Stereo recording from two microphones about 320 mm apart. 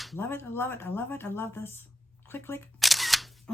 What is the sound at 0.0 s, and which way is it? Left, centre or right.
Speech, centre.